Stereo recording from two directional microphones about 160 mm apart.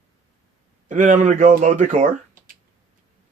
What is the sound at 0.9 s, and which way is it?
Speech, 55° right (ahead or behind).